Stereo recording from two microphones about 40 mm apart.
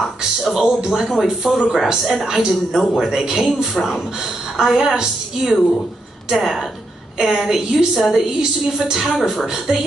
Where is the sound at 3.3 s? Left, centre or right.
Centre.